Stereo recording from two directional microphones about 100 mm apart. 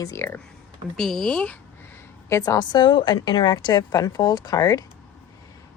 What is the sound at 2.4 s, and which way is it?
A woman's voice, 40° left (ahead or behind).